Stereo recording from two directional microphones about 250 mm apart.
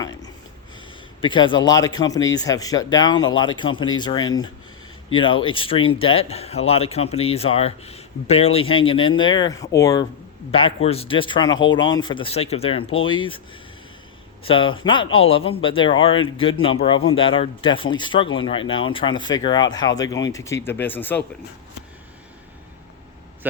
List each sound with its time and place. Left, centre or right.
0.0 s a sound: centre
1.2 s speech: centre
10.8 s speech: left
14.4 s speech: left